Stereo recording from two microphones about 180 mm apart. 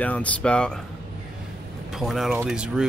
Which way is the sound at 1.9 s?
Centre (ahead or behind).